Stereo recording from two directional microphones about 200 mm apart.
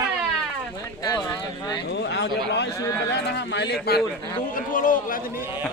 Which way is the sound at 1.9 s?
55° left (ahead or behind).